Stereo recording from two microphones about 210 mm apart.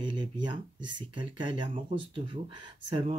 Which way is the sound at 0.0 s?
20° right (ahead or behind).